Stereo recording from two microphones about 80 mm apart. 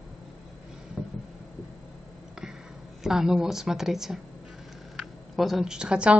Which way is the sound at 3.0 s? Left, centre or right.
Centre.